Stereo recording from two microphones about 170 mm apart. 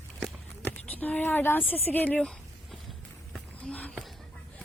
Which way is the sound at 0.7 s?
10° left (ahead or behind).